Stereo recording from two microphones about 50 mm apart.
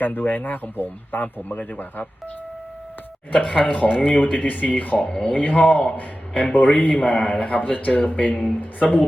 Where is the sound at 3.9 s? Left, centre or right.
Centre.